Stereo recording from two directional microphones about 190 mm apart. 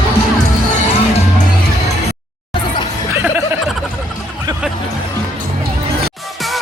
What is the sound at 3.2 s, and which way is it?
Music, 10° right (ahead or behind).